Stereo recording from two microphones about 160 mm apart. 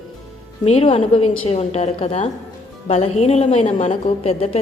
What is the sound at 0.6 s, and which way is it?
A woman's voice, 40° left (ahead or behind).